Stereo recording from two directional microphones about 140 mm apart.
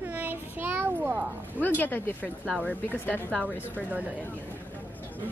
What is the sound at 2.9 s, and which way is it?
Speech, 10° left (ahead or behind).